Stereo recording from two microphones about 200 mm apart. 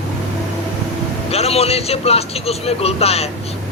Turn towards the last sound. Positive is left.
turn(degrees=30)  # may be behind; listen again after turning